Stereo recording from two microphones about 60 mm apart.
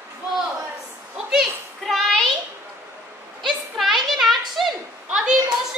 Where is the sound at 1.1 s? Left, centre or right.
Centre.